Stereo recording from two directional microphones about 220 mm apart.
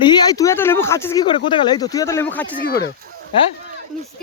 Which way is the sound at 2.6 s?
45° left (ahead or behind).